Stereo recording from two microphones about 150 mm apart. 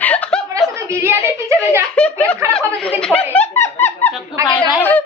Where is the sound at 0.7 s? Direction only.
15° right (ahead or behind).